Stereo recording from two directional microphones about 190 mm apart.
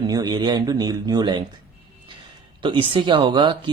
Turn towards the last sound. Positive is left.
turn(degrees=-25)  # may be behind; listen again after turning